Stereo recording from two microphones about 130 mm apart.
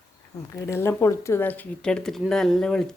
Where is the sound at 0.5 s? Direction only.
20° left (ahead or behind).